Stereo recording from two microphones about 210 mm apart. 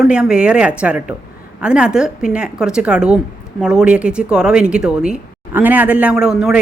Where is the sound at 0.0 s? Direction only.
5° right (ahead or behind).